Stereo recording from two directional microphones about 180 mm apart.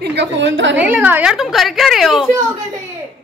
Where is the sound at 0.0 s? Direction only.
70° right (ahead or behind); by 0.7 s 85° right.